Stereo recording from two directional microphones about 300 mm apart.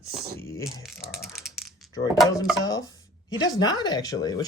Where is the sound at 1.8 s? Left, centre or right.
Centre.